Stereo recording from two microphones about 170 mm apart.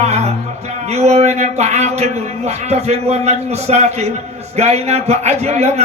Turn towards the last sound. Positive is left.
turn(degrees=-40)  # may be behind; listen again after turning